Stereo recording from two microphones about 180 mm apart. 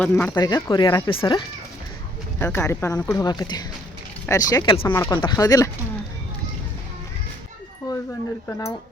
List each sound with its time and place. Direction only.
0.0 s speech: 10° left (ahead or behind)
0.3 s speech: 25° left (ahead or behind)
2.4 s speech: 15° left (ahead or behind)
4.9 s speech: 10° left (ahead or behind)
5.1 s speech: 25° left (ahead or behind)
8.4 s speech: 15° left (ahead or behind)